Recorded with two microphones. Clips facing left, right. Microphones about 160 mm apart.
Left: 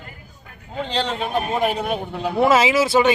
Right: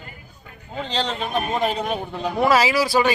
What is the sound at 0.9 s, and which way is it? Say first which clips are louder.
A man's voice: left 1 dB; 10° left (ahead or behind).